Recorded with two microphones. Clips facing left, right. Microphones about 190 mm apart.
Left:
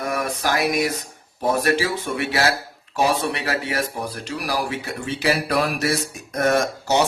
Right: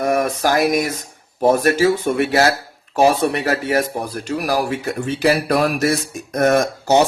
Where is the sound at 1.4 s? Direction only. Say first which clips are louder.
Right 6 dB; 45° right (ahead or behind).